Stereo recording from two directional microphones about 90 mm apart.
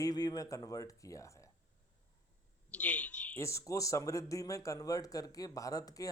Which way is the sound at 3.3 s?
35° left (ahead or behind).